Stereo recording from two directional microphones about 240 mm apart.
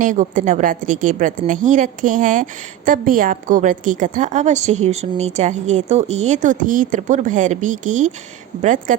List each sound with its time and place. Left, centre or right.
0.0 s a woman's voice: right